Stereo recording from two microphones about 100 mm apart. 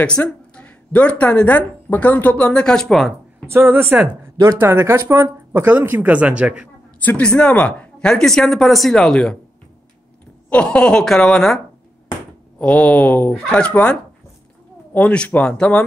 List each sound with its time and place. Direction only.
0.0 s speech: 10° left (ahead or behind)
3.4 s speech: 25° right (ahead or behind)
7.1 s speech: 10° left (ahead or behind)
10.5 s speech: 10° left (ahead or behind)
15.0 s speech: 15° left (ahead or behind)